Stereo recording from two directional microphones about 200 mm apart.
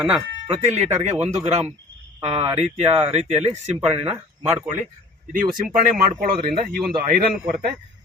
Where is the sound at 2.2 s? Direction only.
30° right (ahead or behind).